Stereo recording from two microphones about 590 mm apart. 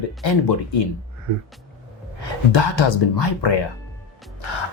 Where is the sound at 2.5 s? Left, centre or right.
Left.